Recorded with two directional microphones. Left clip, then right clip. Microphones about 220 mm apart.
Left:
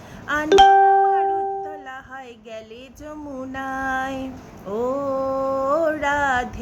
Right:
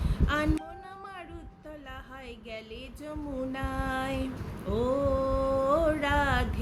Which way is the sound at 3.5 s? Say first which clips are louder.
Left 11 dB; 20° left (ahead or behind).